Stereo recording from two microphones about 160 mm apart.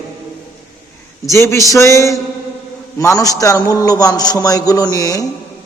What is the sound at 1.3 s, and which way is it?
A man's voice, 20° left (ahead or behind).